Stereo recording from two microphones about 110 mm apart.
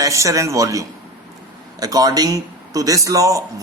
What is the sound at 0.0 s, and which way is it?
Speech, 30° right (ahead or behind).